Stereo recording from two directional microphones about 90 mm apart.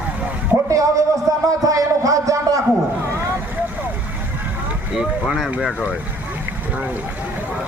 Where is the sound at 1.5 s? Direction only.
40° right (ahead or behind).